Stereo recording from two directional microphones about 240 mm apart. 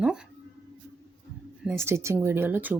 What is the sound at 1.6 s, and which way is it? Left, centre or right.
Speech, centre.